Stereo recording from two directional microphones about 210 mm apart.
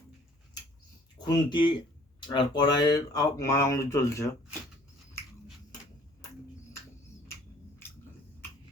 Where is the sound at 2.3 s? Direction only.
20° left (ahead or behind).